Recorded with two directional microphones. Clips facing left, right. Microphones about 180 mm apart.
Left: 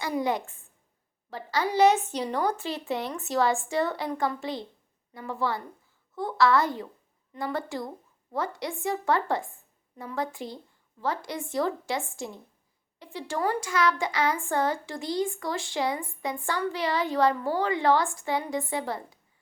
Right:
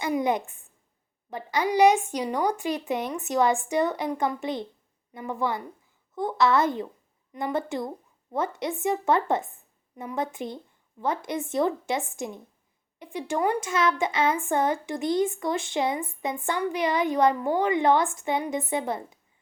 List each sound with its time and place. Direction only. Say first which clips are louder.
0.0 s speech: right 3 dB; 20° right (ahead or behind)